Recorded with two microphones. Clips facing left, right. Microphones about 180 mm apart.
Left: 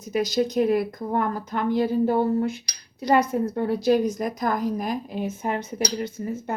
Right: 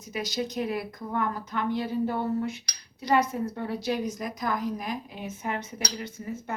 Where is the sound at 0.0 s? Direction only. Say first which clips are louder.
Left 8 dB; 40° left (ahead or behind).